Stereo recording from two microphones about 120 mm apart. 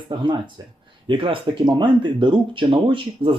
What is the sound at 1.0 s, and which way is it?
Speech, 45° right (ahead or behind).